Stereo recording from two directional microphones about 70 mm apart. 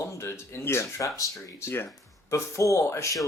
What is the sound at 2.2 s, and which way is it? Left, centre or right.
Speech, left.